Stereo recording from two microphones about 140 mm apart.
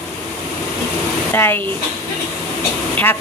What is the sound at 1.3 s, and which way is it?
Speech, 15° left (ahead or behind).